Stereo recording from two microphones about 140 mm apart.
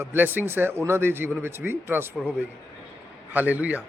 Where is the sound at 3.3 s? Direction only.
10° right (ahead or behind).